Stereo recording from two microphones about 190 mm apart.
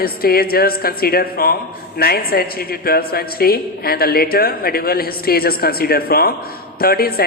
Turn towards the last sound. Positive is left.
turn(degrees=50)  # may be behind; listen again after turning